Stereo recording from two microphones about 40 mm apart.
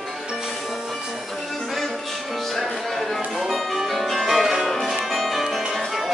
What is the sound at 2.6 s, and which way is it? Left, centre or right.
Music, centre.